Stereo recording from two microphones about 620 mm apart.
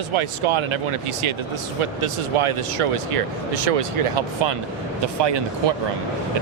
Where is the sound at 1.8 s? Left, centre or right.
Right.